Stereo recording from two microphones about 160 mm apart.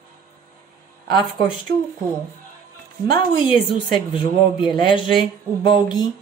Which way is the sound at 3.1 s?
30° left (ahead or behind).